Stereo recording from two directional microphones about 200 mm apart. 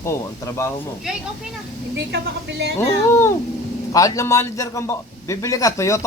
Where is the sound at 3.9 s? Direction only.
15° left (ahead or behind).